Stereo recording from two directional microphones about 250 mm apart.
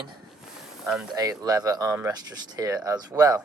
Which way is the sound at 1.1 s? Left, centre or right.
Centre.